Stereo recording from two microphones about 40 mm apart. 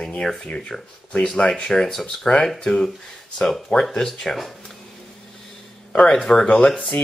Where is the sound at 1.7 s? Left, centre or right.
Centre.